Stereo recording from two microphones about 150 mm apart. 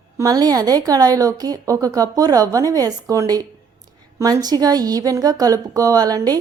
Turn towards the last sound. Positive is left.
turn(degrees=-25)  # may be behind; listen again after turning